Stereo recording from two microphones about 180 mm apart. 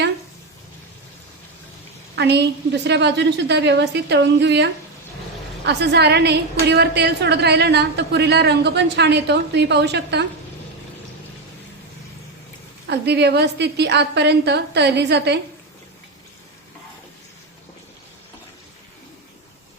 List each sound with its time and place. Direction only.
2.1 s a woman's voice: 70° right (ahead or behind)
12.9 s a woman's voice: 70° right (ahead or behind)